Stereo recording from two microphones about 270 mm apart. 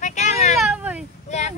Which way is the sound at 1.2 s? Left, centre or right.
Left.